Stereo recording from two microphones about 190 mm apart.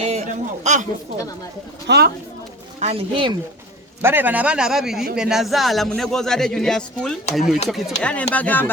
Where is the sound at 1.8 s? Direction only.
60° right (ahead or behind).